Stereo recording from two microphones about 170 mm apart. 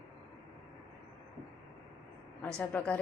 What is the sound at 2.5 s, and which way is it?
Speech, 10° left (ahead or behind).